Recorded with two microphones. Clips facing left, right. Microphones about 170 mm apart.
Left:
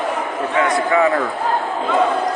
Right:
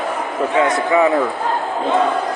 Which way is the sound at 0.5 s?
20° right (ahead or behind).